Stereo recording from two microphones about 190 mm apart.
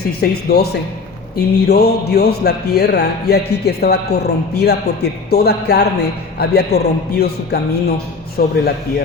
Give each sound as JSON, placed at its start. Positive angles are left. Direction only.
{"t": 0.2, "sound": "speech", "side_deg": 55}